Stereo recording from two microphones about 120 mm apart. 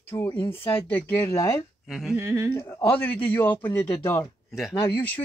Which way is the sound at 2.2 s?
25° right (ahead or behind).